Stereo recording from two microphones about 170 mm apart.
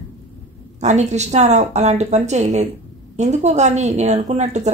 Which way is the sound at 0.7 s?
45° right (ahead or behind).